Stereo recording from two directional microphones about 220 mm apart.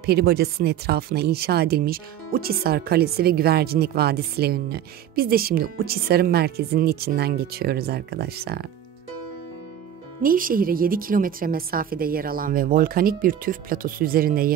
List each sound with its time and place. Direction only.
0.0 s speech: 45° right (ahead or behind)
10.2 s a woman's voice: 40° right (ahead or behind)